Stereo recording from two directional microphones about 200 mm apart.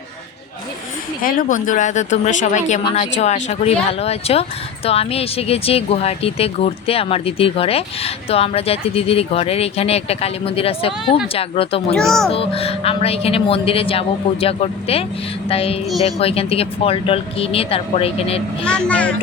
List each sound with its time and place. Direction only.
1.2 s speech: 45° left (ahead or behind)
11.9 s a child's voice: centre (ahead or behind)
12.3 s speech: 30° left (ahead or behind)
18.6 s speech: 5° left (ahead or behind)